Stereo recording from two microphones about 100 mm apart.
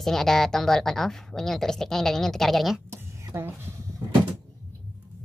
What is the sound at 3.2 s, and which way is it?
Speech, 25° right (ahead or behind).